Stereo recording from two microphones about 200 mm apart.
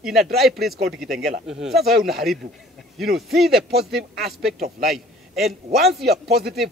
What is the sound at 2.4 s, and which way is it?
Speech, 35° right (ahead or behind).